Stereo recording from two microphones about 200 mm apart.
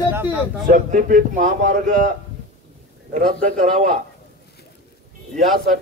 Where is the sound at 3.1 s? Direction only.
45° right (ahead or behind).